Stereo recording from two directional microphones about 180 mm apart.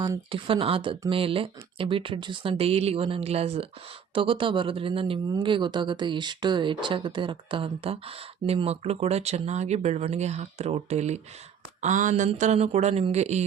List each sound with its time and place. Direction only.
0.0 s speech: 25° right (ahead or behind)